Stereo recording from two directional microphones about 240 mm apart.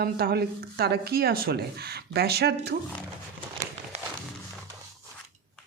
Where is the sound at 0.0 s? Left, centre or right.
Right.